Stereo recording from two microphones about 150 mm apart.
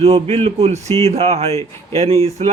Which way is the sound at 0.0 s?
45° right (ahead or behind).